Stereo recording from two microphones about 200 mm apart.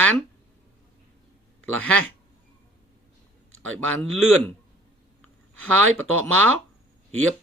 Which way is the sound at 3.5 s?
90° right.